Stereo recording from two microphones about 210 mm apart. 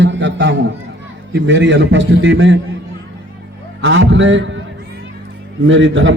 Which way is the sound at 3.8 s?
65° right (ahead or behind).